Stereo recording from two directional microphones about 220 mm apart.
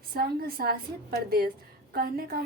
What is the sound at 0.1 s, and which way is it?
A woman's voice, 40° right (ahead or behind).